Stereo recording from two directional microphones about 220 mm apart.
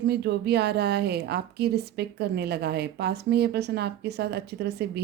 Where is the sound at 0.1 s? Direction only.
45° right (ahead or behind).